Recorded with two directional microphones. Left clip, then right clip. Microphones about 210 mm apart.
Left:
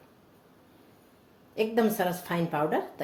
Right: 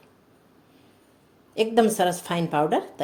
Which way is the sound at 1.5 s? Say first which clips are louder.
Right 6 dB; 40° right (ahead or behind).